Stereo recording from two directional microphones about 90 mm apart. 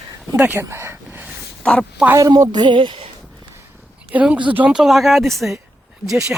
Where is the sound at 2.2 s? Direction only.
45° right (ahead or behind); by 3.1 s 85° right.